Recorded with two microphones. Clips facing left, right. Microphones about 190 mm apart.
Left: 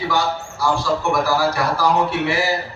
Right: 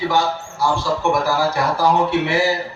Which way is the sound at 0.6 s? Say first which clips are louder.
Right 1 dB; 25° right (ahead or behind).